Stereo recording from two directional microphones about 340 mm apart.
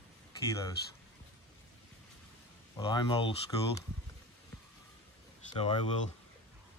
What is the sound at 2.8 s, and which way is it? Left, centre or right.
Speech, centre.